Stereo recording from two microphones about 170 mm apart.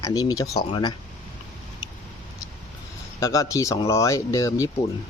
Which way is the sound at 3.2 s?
20° left (ahead or behind).